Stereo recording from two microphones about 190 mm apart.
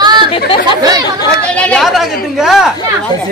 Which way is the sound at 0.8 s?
20° right (ahead or behind).